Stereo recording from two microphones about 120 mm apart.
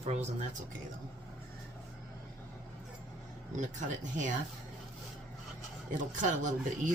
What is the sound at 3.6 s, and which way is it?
Speech, 90° right.